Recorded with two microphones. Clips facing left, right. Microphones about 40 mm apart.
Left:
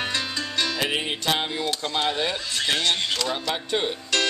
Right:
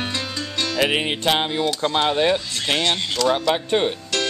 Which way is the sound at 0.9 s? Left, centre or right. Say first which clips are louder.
Right 5 dB; right.